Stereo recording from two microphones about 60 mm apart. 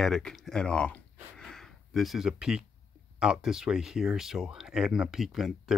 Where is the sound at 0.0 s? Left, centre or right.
Centre.